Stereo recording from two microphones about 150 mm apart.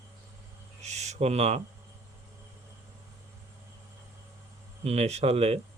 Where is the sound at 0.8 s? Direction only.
50° right (ahead or behind).